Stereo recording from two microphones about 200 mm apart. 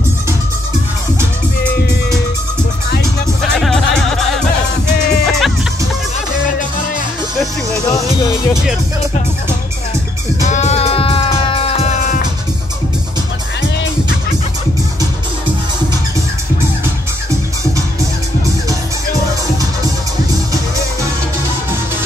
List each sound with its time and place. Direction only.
3.5 s music: centre (ahead or behind)
5.2 s music: centre (ahead or behind)
7.9 s music: 20° left (ahead or behind)
10.4 s music: 35° left (ahead or behind)